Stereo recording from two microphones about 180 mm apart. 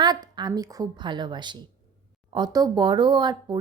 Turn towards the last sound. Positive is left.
turn(degrees=-25)  # may be behind; listen again after turning